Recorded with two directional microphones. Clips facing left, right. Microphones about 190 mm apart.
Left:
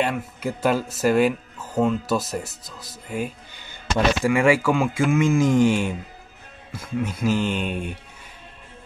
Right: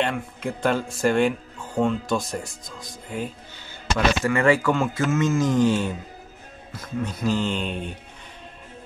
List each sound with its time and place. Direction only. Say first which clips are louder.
0.0 s speech: left 1 dB; 5° left (ahead or behind)